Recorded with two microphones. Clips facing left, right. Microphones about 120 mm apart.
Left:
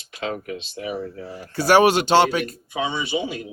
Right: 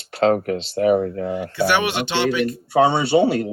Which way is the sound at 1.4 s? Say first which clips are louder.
Left 5 dB; 40° left (ahead or behind).